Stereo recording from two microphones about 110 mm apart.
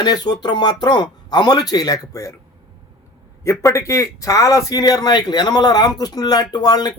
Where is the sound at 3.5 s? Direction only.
25° left (ahead or behind).